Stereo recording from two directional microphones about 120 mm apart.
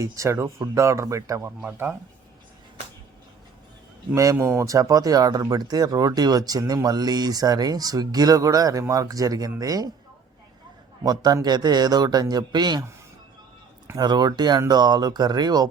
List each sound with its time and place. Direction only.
0.0 s speech: 25° right (ahead or behind)
4.1 s speech: 25° right (ahead or behind)
11.0 s speech: 35° right (ahead or behind)
13.8 s speech: 35° right (ahead or behind)